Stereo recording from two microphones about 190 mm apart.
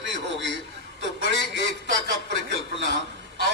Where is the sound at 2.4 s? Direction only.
65° right (ahead or behind).